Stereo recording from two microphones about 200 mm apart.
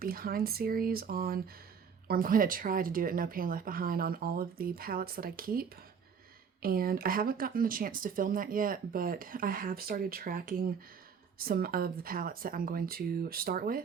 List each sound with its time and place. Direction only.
0.0 s speech: 45° right (ahead or behind)